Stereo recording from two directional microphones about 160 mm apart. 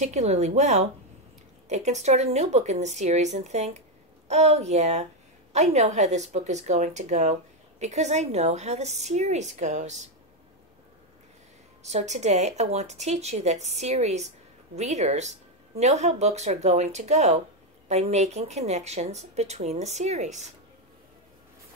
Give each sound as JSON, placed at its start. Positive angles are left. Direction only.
{"t": 0.0, "sound": "speech", "side_deg": -45}
{"t": 11.8, "sound": "speech", "side_deg": -45}